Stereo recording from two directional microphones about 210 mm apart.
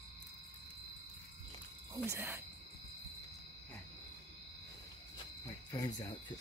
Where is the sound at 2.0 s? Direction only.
10° right (ahead or behind).